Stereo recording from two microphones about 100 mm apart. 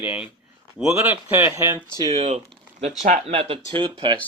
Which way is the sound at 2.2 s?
90° right.